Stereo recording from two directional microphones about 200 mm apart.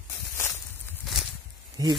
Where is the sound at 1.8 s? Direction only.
20° right (ahead or behind).